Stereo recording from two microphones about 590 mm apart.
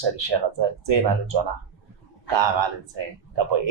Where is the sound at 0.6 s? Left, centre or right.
Right.